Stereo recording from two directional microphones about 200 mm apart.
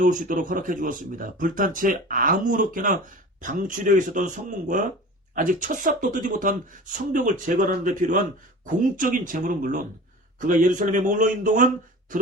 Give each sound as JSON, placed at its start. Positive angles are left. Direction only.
{"t": 0.0, "sound": "a man's voice", "side_deg": -40}